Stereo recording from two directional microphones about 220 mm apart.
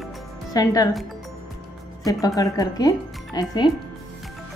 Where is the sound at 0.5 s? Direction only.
15° left (ahead or behind).